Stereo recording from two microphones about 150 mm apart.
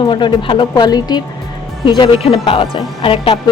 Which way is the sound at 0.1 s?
35° left (ahead or behind).